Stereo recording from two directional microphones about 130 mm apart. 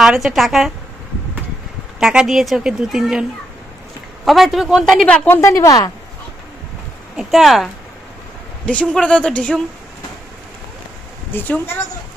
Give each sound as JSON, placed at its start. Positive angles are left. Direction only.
{"t": 0.0, "sound": "a woman's voice", "side_deg": -5}
{"t": 2.0, "sound": "a woman's voice", "side_deg": -5}
{"t": 5.4, "sound": "a woman's voice", "side_deg": 20}
{"t": 7.2, "sound": "a woman's voice", "side_deg": 0}
{"t": 8.6, "sound": "speech", "side_deg": 10}
{"t": 11.3, "sound": "speech", "side_deg": 15}